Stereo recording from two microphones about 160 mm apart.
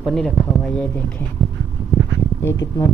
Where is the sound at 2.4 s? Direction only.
20° left (ahead or behind).